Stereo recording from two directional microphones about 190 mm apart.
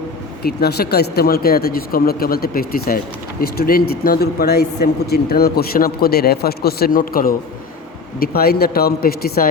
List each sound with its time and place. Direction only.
0.4 s speech: 55° left (ahead or behind)